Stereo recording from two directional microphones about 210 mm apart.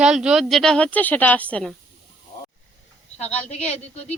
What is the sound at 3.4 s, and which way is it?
Speech, 30° left (ahead or behind).